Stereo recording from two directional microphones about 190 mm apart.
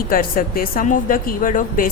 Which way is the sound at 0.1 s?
50° left (ahead or behind).